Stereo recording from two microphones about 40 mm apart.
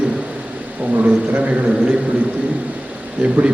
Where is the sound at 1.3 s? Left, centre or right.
Right.